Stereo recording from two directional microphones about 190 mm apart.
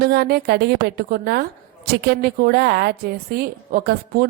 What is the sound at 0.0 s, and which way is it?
A woman's voice, 60° right (ahead or behind).